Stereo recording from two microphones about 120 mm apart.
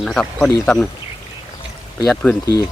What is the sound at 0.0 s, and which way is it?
Speech, 5° left (ahead or behind).